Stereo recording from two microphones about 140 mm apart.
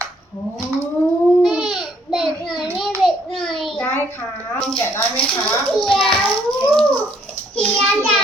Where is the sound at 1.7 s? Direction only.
5° right (ahead or behind).